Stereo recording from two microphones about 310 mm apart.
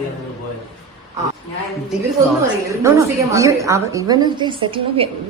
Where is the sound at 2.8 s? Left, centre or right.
Centre.